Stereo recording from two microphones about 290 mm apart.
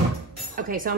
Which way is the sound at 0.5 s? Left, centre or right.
Right.